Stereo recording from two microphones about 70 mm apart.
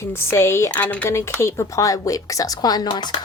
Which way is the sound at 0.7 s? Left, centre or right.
Left.